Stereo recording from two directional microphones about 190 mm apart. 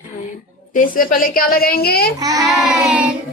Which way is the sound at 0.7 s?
45° left (ahead or behind).